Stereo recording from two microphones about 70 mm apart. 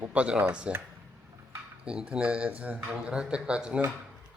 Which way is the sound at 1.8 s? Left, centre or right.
Centre.